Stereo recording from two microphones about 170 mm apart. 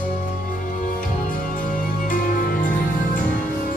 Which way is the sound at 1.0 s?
55° left (ahead or behind).